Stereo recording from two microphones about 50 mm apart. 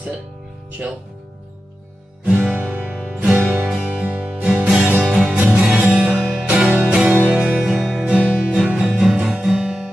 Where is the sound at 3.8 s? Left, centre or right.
Right.